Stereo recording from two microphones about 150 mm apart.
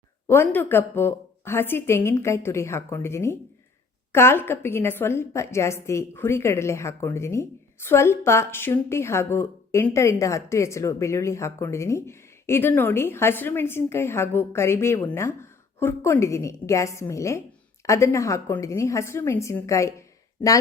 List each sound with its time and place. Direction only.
0.3 s a woman's voice: 15° left (ahead or behind)